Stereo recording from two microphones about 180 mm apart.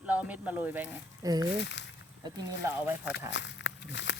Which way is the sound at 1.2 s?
20° right (ahead or behind).